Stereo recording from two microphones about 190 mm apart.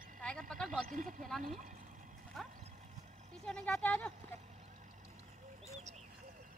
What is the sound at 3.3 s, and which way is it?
Speech, 5° left (ahead or behind).